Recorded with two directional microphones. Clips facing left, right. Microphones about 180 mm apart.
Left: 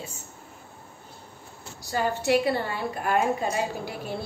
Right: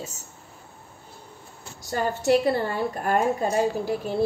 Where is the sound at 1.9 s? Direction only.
45° right (ahead or behind).